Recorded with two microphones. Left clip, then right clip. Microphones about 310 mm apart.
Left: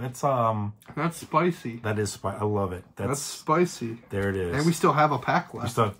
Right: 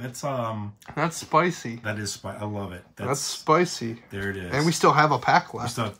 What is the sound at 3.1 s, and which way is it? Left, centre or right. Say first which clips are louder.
Speech: right 4 dB; right.